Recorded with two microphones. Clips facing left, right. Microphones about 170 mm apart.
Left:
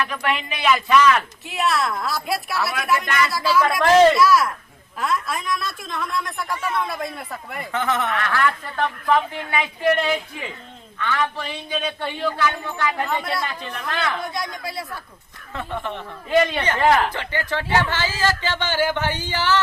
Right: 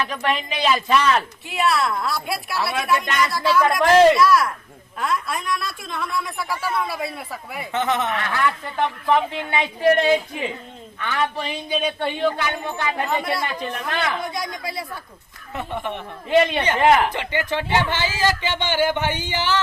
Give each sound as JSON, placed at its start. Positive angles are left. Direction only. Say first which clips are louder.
{"t": 0.0, "sound": "speech", "louder": "right 1 dB", "side_deg": -30}
{"t": 1.5, "sound": "a man's voice", "louder": "right 1 dB", "side_deg": 0}
{"t": 7.7, "sound": "speech", "louder": "right 1 dB", "side_deg": -20}
{"t": 14.3, "sound": "a man's voice", "louder": "even", "side_deg": 0}
{"t": 15.5, "sound": "speech", "louder": "right 1 dB", "side_deg": -15}